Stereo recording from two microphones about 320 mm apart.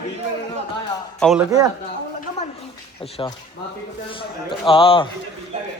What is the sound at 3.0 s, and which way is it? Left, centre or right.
A man's voice, centre.